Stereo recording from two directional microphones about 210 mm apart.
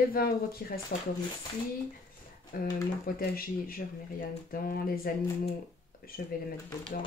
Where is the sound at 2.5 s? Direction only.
45° left (ahead or behind).